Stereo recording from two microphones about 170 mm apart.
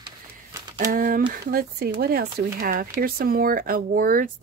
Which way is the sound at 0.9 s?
55° right (ahead or behind).